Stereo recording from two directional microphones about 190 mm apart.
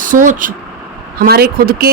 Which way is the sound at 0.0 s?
45° right (ahead or behind).